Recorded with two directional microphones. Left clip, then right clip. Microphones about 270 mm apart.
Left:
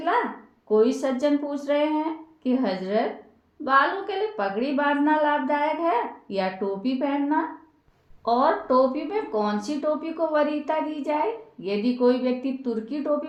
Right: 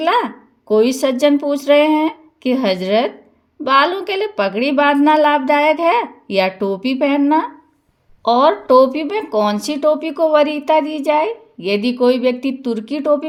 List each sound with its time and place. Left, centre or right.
0.7 s speech: right